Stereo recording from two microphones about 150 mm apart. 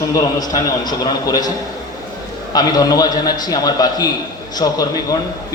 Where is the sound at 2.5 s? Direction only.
25° left (ahead or behind).